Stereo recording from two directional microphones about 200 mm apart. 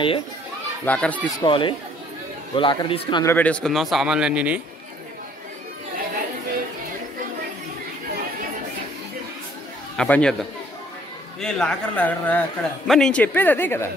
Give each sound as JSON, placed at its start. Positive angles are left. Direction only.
{"t": 0.8, "sound": "a man's voice", "side_deg": 5}
{"t": 1.4, "sound": "a man's voice", "side_deg": 25}
{"t": 3.3, "sound": "speech", "side_deg": 10}
{"t": 9.9, "sound": "speech", "side_deg": 5}
{"t": 11.4, "sound": "a man's voice", "side_deg": 5}